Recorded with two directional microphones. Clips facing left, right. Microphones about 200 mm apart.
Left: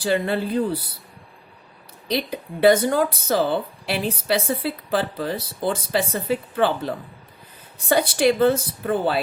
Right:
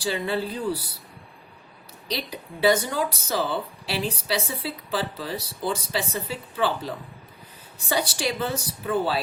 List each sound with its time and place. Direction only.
0.0 s a woman's voice: 55° left (ahead or behind)
2.0 s a woman's voice: 55° left (ahead or behind)